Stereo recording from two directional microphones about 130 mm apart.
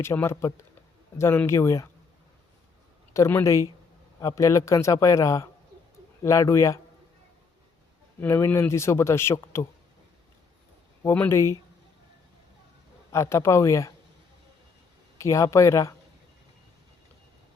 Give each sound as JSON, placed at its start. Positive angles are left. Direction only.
{"t": 0.0, "sound": "speech", "side_deg": 20}
{"t": 3.1, "sound": "speech", "side_deg": 20}
{"t": 8.2, "sound": "speech", "side_deg": 15}
{"t": 11.0, "sound": "speech", "side_deg": 15}
{"t": 13.1, "sound": "speech", "side_deg": 20}
{"t": 15.2, "sound": "speech", "side_deg": 25}